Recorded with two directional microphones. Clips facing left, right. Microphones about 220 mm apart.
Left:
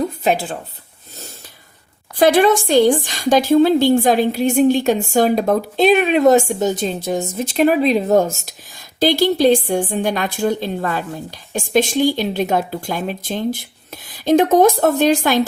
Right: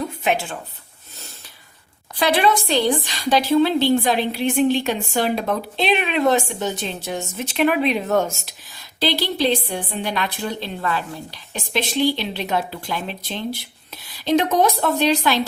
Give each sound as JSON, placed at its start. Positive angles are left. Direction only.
{"t": 0.3, "sound": "speech", "side_deg": 35}
{"t": 2.1, "sound": "a woman's voice", "side_deg": 45}